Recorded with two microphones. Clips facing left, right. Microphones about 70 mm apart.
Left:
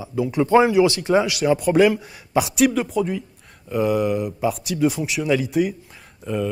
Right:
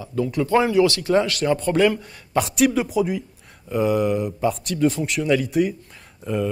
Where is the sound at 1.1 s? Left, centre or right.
Centre.